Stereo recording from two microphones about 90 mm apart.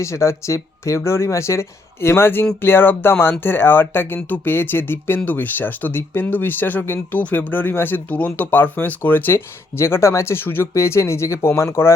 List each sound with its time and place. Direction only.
0.0 s speech: 30° left (ahead or behind)